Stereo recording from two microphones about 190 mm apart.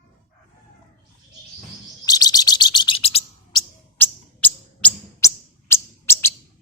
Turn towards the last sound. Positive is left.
turn(degrees=15)  # may be behind; listen again after turning